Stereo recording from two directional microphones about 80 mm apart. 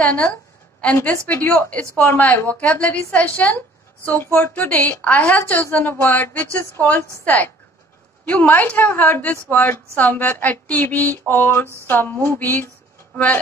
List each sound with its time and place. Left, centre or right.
0.0 s a woman's voice: centre